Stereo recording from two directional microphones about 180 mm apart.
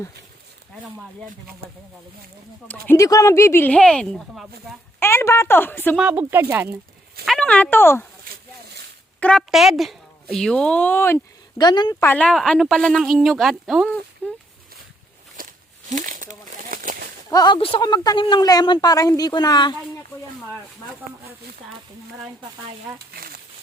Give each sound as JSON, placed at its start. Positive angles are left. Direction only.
{"t": 2.8, "sound": "speech", "side_deg": 15}
{"t": 4.9, "sound": "speech", "side_deg": 15}
{"t": 6.0, "sound": "speech", "side_deg": -10}
{"t": 7.3, "sound": "speech", "side_deg": 5}
{"t": 9.2, "sound": "speech", "side_deg": 0}
{"t": 12.0, "sound": "speech", "side_deg": 5}
{"t": 15.4, "sound": "a sound", "side_deg": -50}
{"t": 15.9, "sound": "crumpling", "side_deg": -45}
{"t": 17.3, "sound": "speech", "side_deg": 25}
{"t": 23.1, "sound": "speech", "side_deg": -60}